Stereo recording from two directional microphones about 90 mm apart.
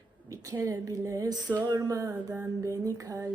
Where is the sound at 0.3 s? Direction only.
40° right (ahead or behind).